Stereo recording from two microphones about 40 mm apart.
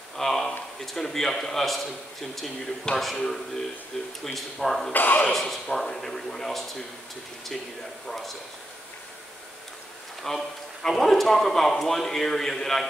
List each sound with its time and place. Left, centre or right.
0.1 s a man's voice: centre
4.9 s speech: left
5.3 s speech: centre
8.1 s speech: centre
10.2 s speech: centre